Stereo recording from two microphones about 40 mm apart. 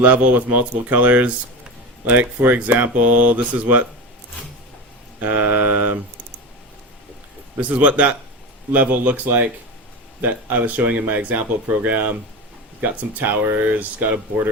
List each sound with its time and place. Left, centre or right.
0.0 s speech: right
5.2 s speech: right
7.6 s a man's voice: right
8.7 s speech: right
13.7 s speech: right